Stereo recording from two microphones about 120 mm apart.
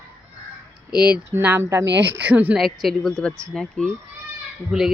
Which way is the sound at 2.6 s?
Centre (ahead or behind).